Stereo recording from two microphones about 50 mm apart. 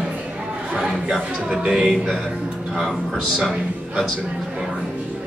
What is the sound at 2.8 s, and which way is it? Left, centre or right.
Speech, centre.